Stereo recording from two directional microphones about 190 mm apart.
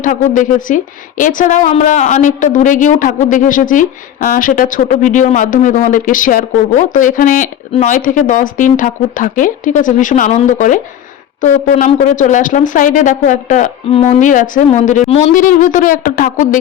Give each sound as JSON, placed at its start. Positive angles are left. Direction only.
{"t": 0.0, "sound": "speech", "side_deg": 45}